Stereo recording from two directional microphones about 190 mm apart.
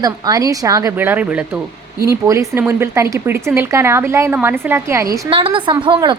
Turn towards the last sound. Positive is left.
turn(degrees=-20)  # may be behind; listen again after turning